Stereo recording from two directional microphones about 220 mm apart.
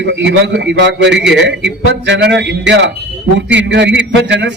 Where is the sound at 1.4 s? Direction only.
55° right (ahead or behind).